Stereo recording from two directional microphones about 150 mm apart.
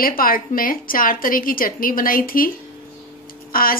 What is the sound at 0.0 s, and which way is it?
A woman's voice, 75° left (ahead or behind).